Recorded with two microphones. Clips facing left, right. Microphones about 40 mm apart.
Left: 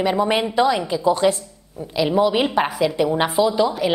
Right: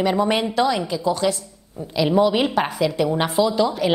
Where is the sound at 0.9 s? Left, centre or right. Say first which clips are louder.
Left 3 dB; left.